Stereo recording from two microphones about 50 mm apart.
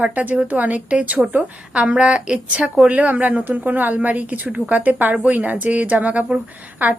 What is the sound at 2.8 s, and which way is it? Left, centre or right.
A woman's voice, right.